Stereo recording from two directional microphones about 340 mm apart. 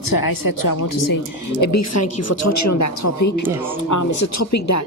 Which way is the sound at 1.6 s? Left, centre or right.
Left.